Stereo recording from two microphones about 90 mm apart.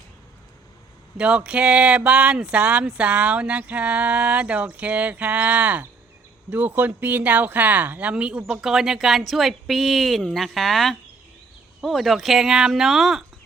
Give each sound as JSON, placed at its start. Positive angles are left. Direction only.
{"t": 1.1, "sound": "speech", "side_deg": -15}